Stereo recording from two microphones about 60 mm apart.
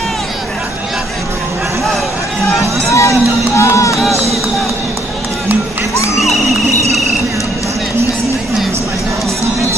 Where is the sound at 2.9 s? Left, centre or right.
Left.